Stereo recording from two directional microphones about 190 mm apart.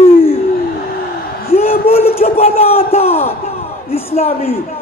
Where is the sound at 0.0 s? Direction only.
30° left (ahead or behind).